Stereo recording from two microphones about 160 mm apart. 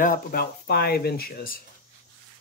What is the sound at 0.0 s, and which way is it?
Speech, 65° left (ahead or behind).